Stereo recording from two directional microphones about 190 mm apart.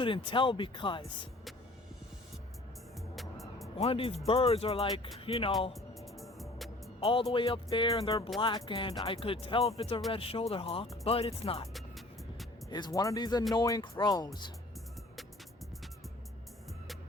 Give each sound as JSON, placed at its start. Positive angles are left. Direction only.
{"t": 0.0, "sound": "speech", "side_deg": 25}
{"t": 3.8, "sound": "speech", "side_deg": 30}
{"t": 6.1, "sound": "music", "side_deg": 0}
{"t": 7.0, "sound": "speech", "side_deg": 30}
{"t": 11.7, "sound": "music", "side_deg": 0}
{"t": 12.7, "sound": "speech", "side_deg": 20}